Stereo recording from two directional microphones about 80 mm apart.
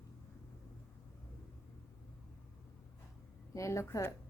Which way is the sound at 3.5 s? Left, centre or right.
Left.